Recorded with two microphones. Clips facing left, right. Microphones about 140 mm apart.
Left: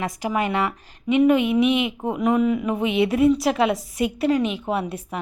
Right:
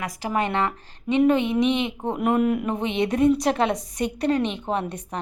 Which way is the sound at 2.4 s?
55° right (ahead or behind).